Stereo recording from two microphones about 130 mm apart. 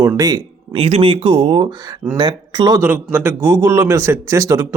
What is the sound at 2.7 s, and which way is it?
A man's voice, 15° right (ahead or behind).